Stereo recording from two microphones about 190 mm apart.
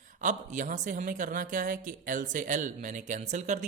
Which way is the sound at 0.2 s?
40° right (ahead or behind).